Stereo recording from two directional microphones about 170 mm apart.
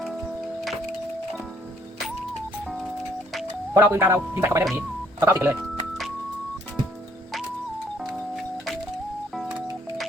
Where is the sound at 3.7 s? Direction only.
15° right (ahead or behind).